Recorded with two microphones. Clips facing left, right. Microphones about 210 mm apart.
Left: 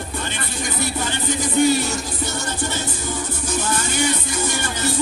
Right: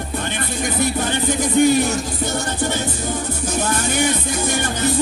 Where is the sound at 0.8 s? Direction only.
55° right (ahead or behind).